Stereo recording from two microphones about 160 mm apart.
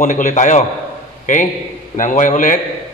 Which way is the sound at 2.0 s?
55° left (ahead or behind).